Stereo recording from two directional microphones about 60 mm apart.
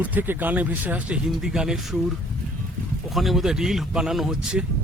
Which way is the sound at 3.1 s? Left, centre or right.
Centre.